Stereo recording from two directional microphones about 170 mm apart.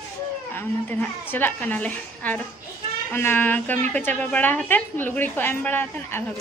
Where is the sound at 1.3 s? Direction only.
10° left (ahead or behind).